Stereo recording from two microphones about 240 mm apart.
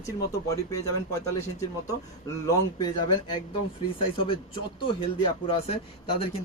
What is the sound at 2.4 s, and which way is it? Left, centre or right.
Speech, centre.